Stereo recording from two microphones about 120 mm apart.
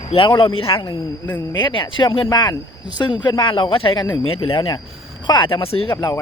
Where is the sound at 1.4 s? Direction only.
35° left (ahead or behind); by 5.9 s 50° left (ahead or behind).